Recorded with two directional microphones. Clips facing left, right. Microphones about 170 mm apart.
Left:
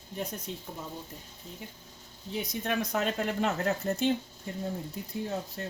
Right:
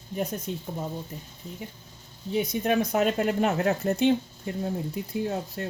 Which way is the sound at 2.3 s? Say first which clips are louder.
Right 7 dB; 50° right (ahead or behind).